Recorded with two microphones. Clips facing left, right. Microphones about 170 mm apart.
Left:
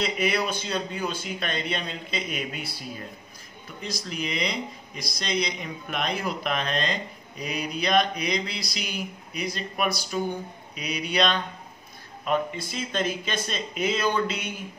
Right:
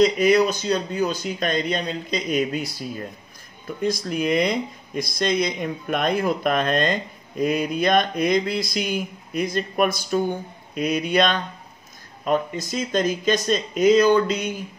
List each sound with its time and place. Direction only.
0.0 s speech: 40° right (ahead or behind)
3.8 s speech: 50° right (ahead or behind)